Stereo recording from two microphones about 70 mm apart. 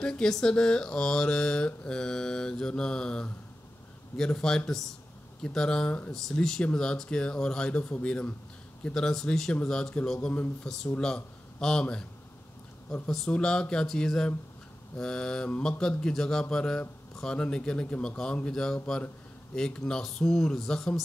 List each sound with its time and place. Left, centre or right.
0.0 s a man's voice: centre
13.3 s speech: centre